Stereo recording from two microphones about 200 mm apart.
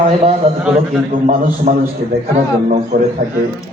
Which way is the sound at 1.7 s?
45° right (ahead or behind).